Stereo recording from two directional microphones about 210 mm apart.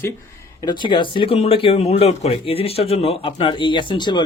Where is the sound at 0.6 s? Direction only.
20° left (ahead or behind).